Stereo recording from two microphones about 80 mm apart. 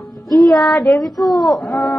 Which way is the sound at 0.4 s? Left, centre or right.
Centre.